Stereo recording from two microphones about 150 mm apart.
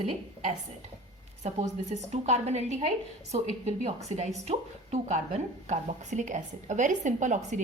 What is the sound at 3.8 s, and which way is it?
A woman's voice, 45° right (ahead or behind).